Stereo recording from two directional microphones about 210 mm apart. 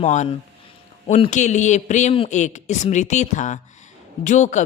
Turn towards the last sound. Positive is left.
turn(degrees=35)  # may be behind; listen again after turning